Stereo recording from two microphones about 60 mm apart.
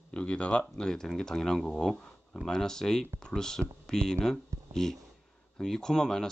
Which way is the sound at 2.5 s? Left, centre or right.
Centre.